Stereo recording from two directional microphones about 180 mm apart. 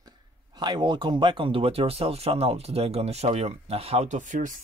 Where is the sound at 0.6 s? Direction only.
25° right (ahead or behind).